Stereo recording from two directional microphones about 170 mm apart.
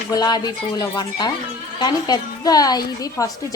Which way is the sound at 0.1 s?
25° left (ahead or behind).